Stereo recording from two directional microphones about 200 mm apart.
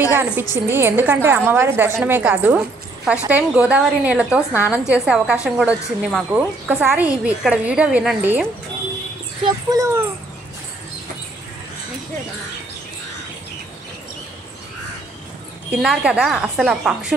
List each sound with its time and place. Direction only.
0.1 s a woman's voice: 10° right (ahead or behind)
9.4 s a woman's voice: 15° right (ahead or behind)
15.7 s a woman's voice: 5° right (ahead or behind)